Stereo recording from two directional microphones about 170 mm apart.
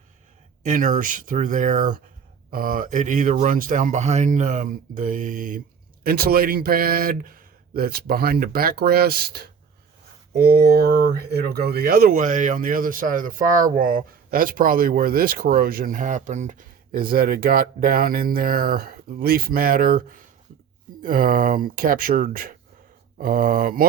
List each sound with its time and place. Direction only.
0.6 s speech: 50° right (ahead or behind)
6.0 s speech: 65° right (ahead or behind)